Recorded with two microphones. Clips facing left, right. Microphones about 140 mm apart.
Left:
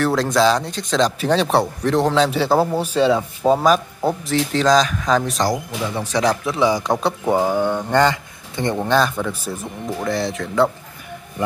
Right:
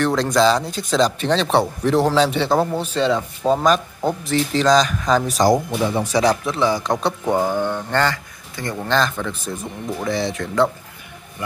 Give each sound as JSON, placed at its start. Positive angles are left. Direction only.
{"t": 0.0, "sound": "a man's voice", "side_deg": 0}
{"t": 1.3, "sound": "speech", "side_deg": 10}
{"t": 1.6, "sound": "a man's voice", "side_deg": 0}
{"t": 5.5, "sound": "speech", "side_deg": -20}
{"t": 6.1, "sound": "a man's voice", "side_deg": 0}
{"t": 6.6, "sound": "speech", "side_deg": 10}
{"t": 8.8, "sound": "a man's voice", "side_deg": 10}